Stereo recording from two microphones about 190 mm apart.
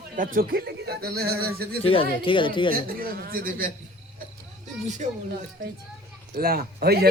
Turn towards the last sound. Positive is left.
turn(degrees=-55)  # may be behind; listen again after turning